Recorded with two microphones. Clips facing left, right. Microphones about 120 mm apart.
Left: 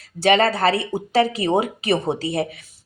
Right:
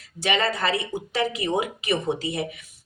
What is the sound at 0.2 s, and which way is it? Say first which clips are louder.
A woman's voice: left 7 dB; 40° left (ahead or behind).